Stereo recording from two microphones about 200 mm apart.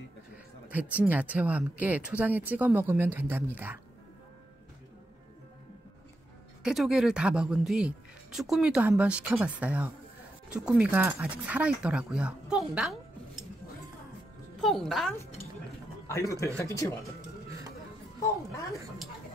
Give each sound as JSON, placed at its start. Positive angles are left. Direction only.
{"t": 0.7, "sound": "speech", "side_deg": -10}
{"t": 6.6, "sound": "speech", "side_deg": 0}
{"t": 14.6, "sound": "speech", "side_deg": 0}
{"t": 16.1, "sound": "a man's voice", "side_deg": 15}
{"t": 18.5, "sound": "a man's voice", "side_deg": 15}